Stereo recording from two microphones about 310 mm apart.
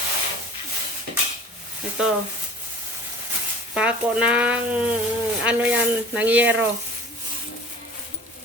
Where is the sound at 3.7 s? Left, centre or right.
Centre.